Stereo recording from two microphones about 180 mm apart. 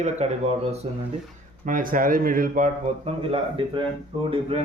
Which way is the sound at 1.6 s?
50° right (ahead or behind).